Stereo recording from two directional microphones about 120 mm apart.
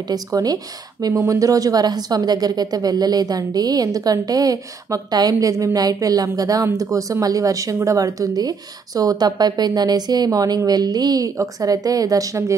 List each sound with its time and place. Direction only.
0.1 s a woman's voice: 30° right (ahead or behind)